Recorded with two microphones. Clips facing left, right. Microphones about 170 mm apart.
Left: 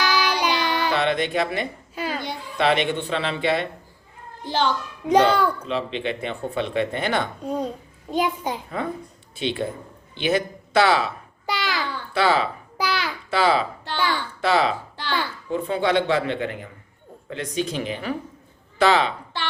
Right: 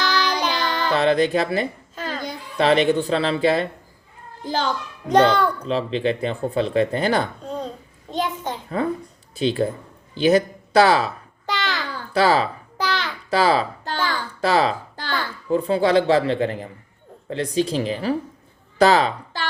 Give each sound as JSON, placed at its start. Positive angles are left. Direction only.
{"t": 0.2, "sound": "child singing", "side_deg": 10}
{"t": 0.9, "sound": "speech", "side_deg": -35}
{"t": 2.0, "sound": "a sound", "side_deg": 10}
{"t": 2.6, "sound": "speech", "side_deg": -35}
{"t": 5.0, "sound": "a child's voice", "side_deg": 10}
{"t": 5.6, "sound": "speech", "side_deg": -35}
{"t": 7.4, "sound": "a child's voice", "side_deg": 10}
{"t": 9.3, "sound": "speech", "side_deg": -40}
{"t": 11.4, "sound": "babbling", "side_deg": 10}
{"t": 11.9, "sound": "babbling", "side_deg": -40}
{"t": 12.7, "sound": "babbling", "side_deg": 10}
{"t": 13.3, "sound": "a child's voice", "side_deg": -40}